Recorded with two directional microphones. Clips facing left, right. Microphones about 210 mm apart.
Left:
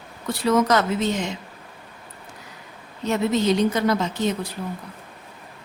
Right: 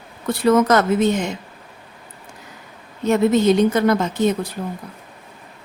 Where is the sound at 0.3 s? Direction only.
55° right (ahead or behind).